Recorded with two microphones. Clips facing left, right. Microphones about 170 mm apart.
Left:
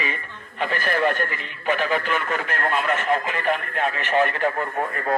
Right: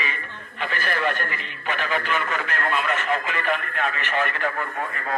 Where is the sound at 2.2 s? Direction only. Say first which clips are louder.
Left 1 dB; 45° left (ahead or behind).